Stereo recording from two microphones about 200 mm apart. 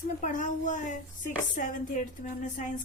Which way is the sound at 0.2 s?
40° left (ahead or behind).